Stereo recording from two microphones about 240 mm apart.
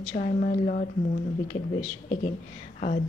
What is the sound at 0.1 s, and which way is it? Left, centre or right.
Speech, left.